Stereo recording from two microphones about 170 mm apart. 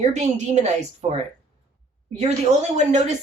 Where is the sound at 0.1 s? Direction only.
45° right (ahead or behind).